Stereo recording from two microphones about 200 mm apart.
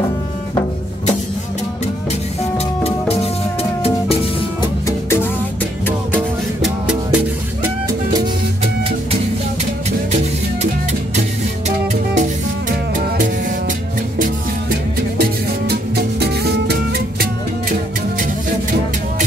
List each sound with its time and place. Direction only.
2.5 s music: 30° left (ahead or behind)
4.8 s music: 10° left (ahead or behind)
12.2 s music: 40° right (ahead or behind)
15.1 s music: 55° right (ahead or behind)